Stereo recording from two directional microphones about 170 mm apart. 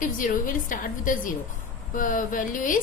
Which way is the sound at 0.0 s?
55° left (ahead or behind).